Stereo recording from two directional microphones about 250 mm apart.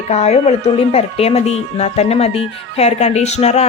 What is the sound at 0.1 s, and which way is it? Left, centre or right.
Speech, left.